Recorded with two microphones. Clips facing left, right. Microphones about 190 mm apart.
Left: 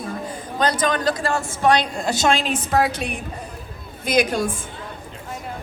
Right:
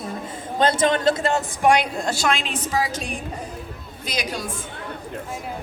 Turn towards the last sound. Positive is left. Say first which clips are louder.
# left 9 dB
turn(degrees=50)  # may be behind; listen again after turning